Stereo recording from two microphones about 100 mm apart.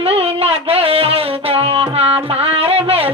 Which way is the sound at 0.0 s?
80° right.